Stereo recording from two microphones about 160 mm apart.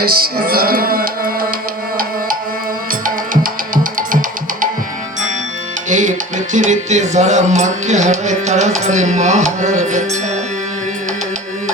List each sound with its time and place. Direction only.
0.0 s music: 70° right (ahead or behind)
5.9 s music: 50° right (ahead or behind)